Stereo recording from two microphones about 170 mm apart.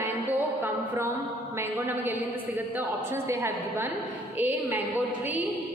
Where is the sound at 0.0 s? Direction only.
10° right (ahead or behind).